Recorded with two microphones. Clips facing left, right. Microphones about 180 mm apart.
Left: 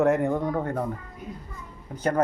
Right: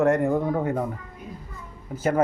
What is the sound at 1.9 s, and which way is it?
Speech, 5° right (ahead or behind).